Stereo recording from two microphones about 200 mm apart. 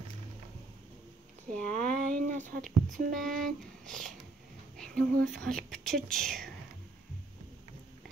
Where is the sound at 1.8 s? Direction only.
40° right (ahead or behind).